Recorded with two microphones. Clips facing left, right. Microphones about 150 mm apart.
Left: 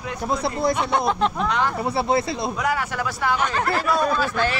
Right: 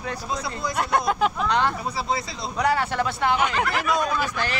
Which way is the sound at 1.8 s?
60° left (ahead or behind).